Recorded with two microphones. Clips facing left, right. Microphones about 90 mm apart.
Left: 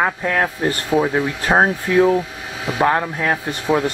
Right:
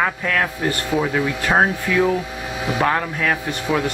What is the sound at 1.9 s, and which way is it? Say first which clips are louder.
Speech: left 7 dB; 30° left (ahead or behind).